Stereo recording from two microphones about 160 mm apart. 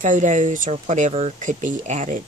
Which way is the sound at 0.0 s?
50° right (ahead or behind).